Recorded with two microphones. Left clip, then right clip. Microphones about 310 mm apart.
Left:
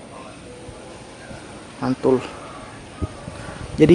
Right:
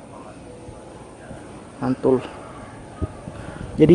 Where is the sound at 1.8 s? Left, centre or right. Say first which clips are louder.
Left 1 dB; centre.